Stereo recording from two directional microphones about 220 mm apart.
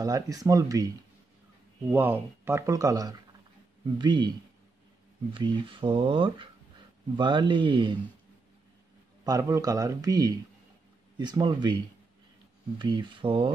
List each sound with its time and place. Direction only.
0.0 s speech: 15° right (ahead or behind)
1.9 s speech: 10° right (ahead or behind)
5.3 s speech: 25° right (ahead or behind)
9.2 s speech: 15° right (ahead or behind)